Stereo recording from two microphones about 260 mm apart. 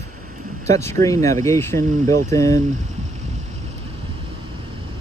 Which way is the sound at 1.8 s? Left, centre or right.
Right.